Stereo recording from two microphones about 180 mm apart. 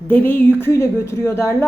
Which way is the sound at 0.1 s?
10° left (ahead or behind).